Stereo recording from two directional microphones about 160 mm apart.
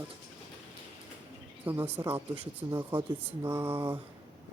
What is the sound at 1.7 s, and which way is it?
Speech, 15° right (ahead or behind).